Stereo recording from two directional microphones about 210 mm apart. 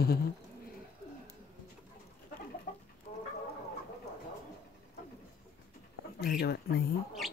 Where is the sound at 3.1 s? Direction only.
35° left (ahead or behind).